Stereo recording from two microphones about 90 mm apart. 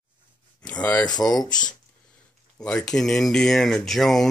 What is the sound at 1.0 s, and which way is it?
Speech, 45° left (ahead or behind).